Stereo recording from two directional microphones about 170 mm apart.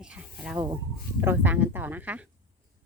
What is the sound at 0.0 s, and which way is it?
Speech, 5° right (ahead or behind).